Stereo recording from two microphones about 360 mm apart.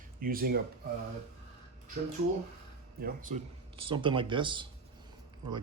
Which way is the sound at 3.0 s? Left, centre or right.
Right.